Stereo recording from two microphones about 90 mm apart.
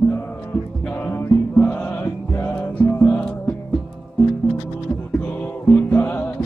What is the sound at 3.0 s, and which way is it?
Music, 15° left (ahead or behind).